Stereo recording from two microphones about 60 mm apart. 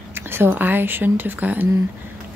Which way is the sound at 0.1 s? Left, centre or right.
Right.